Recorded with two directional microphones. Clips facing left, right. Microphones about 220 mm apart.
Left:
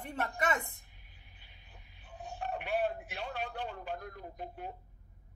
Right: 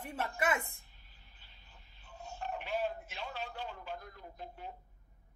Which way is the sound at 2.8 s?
55° left (ahead or behind).